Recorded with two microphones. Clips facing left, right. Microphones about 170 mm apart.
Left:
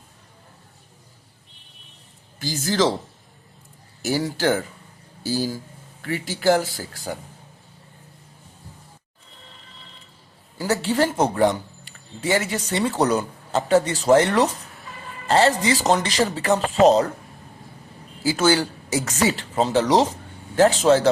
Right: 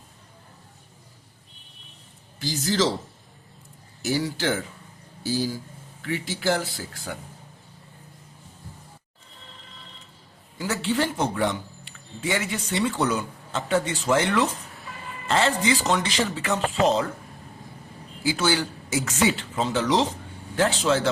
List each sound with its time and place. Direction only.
2.4 s speech: 50° left (ahead or behind)
4.0 s speech: 45° left (ahead or behind)
10.6 s speech: 40° left (ahead or behind)
18.2 s speech: 40° left (ahead or behind)